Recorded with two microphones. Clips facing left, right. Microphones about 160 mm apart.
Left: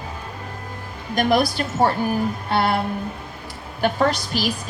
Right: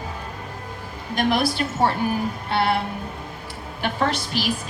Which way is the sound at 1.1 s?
40° left (ahead or behind).